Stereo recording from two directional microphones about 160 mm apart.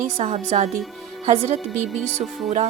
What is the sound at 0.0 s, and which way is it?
Speech, 50° right (ahead or behind).